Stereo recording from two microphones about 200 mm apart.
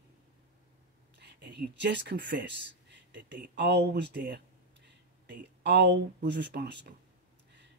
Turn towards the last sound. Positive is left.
turn(degrees=-60)  # may be behind; listen again after turning